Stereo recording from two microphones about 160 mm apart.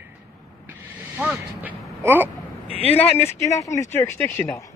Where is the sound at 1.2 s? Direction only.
10° right (ahead or behind).